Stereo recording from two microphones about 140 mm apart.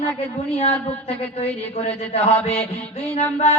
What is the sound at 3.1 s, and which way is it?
Speech, 50° left (ahead or behind).